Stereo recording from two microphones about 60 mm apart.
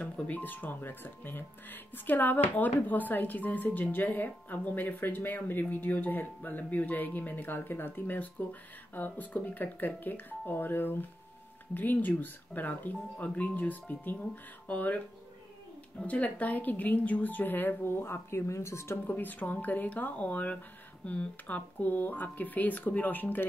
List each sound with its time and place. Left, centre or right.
0.0 s speech: left
16.1 s speech: left
19.0 s speech: left